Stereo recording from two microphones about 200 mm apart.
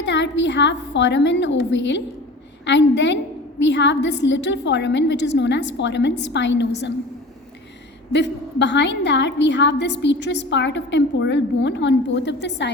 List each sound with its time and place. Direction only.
0.0 s a woman's voice: 65° left (ahead or behind)
8.1 s a woman's voice: 60° left (ahead or behind)